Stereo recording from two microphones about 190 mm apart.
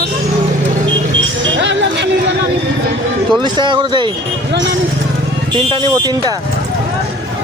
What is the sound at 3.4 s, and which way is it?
Speech, 25° right (ahead or behind).